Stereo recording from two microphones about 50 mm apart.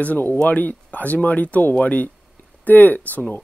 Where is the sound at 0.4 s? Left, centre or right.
Left.